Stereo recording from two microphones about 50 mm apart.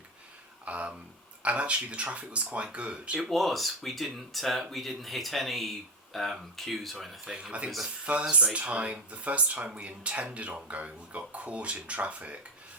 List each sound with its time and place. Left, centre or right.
0.6 s speech: right
3.2 s speech: centre
7.3 s speech: right